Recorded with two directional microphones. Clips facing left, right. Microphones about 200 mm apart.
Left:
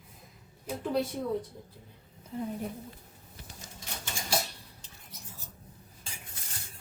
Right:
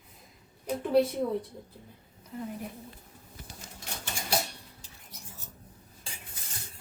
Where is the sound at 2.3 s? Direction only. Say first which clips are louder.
Left 2 dB; 30° left (ahead or behind).